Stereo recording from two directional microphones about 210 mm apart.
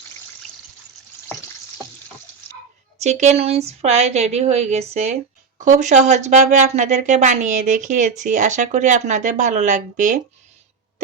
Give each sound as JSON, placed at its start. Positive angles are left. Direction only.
{"t": 3.0, "sound": "speech", "side_deg": -30}